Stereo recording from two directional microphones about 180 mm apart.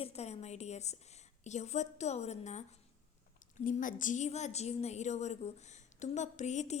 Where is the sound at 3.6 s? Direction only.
45° left (ahead or behind).